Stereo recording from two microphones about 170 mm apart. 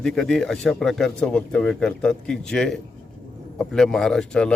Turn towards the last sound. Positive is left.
turn(degrees=5)  # may be behind; listen again after turning